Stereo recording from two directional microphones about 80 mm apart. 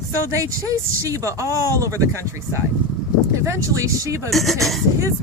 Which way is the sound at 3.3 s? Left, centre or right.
Right.